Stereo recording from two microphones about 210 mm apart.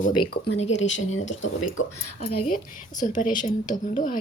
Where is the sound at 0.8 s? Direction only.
65° left (ahead or behind); by 2.4 s 90° left.